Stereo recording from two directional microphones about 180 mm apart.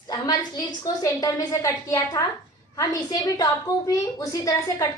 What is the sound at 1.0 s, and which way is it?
A woman's voice, 20° left (ahead or behind).